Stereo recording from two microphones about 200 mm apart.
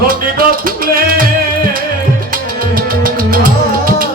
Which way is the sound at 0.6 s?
45° right (ahead or behind).